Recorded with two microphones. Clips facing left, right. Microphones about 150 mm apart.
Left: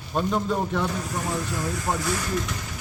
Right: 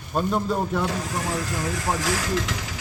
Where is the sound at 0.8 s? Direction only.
90° right.